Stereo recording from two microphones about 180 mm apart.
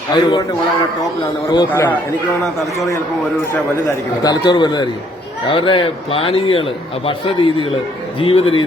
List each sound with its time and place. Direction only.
0.1 s a man's voice: 25° left (ahead or behind)
1.5 s a man's voice: 20° left (ahead or behind)
4.2 s a man's voice: 25° left (ahead or behind)